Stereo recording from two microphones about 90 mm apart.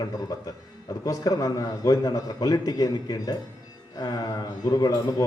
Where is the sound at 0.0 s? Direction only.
45° left (ahead or behind).